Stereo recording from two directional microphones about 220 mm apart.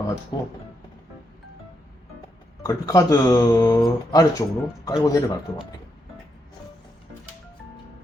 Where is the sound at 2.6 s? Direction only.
15° left (ahead or behind).